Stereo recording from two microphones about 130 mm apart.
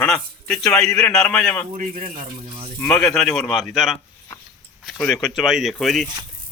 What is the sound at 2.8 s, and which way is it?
Speech, 5° left (ahead or behind).